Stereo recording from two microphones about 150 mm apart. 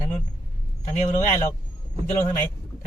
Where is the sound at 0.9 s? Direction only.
50° left (ahead or behind).